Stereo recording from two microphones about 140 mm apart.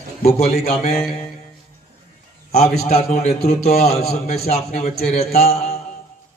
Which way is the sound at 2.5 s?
50° left (ahead or behind).